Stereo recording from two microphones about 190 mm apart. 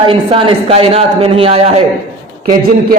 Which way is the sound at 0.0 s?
30° right (ahead or behind).